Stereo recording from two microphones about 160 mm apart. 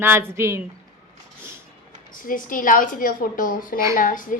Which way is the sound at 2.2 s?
60° left (ahead or behind).